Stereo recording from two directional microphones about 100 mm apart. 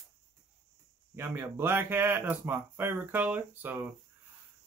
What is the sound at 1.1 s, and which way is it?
Speech, 25° right (ahead or behind).